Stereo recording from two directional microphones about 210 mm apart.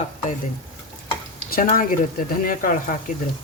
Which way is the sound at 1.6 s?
40° left (ahead or behind).